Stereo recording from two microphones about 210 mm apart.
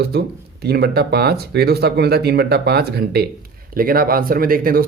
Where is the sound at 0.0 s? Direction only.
50° right (ahead or behind).